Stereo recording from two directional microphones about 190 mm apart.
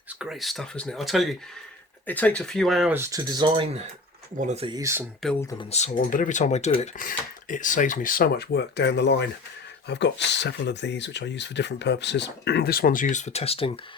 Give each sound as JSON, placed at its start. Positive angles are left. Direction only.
{"t": 0.2, "sound": "speech", "side_deg": 0}
{"t": 2.9, "sound": "speech", "side_deg": -15}
{"t": 4.7, "sound": "speech", "side_deg": -15}
{"t": 5.7, "sound": "speech", "side_deg": 40}
{"t": 7.0, "sound": "speech", "side_deg": 45}